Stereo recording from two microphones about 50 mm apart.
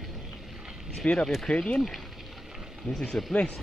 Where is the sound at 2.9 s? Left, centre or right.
Centre.